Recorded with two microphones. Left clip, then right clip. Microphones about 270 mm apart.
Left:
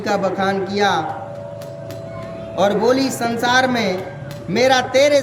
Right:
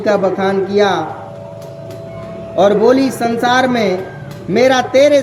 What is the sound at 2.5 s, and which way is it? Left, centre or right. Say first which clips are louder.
A man's voice: right 6 dB; centre.